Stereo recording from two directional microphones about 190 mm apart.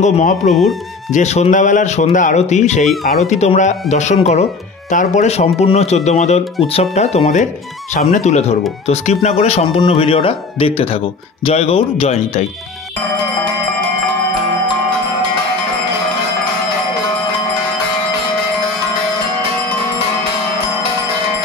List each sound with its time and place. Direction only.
0.0 s speech: 40° left (ahead or behind)